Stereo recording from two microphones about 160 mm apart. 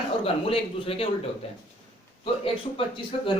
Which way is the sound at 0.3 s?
35° left (ahead or behind).